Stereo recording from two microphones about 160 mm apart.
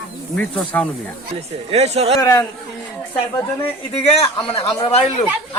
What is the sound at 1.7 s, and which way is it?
Speech, 40° right (ahead or behind).